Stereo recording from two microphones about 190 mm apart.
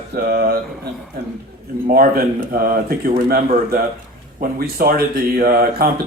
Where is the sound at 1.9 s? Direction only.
50° right (ahead or behind).